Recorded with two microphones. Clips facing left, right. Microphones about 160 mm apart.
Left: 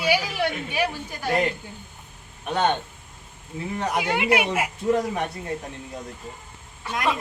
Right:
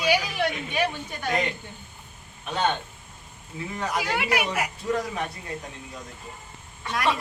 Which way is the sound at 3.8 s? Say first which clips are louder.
Left 3 dB; 20° left (ahead or behind).